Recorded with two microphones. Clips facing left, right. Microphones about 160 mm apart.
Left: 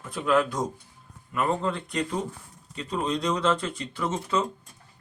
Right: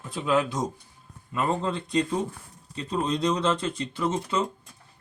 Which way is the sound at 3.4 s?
20° right (ahead or behind).